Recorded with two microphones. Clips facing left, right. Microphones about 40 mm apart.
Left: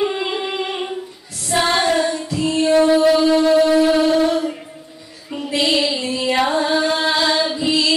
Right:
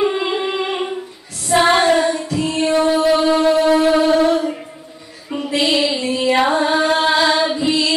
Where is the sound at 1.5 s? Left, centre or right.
Centre.